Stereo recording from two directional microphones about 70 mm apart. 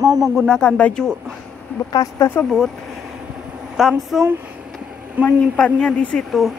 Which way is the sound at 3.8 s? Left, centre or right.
Centre.